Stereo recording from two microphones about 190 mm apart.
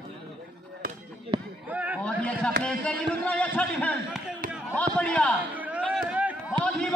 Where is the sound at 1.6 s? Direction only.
10° right (ahead or behind).